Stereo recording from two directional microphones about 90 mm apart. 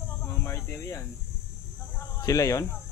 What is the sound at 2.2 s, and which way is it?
Speech, 40° left (ahead or behind).